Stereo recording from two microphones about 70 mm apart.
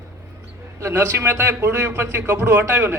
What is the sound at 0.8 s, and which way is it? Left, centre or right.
A man's voice, right.